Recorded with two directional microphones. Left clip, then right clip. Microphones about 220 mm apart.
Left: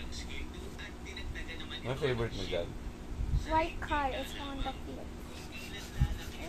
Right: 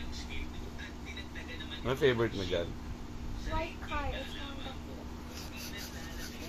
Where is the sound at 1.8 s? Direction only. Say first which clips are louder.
Right 5 dB; 45° right (ahead or behind).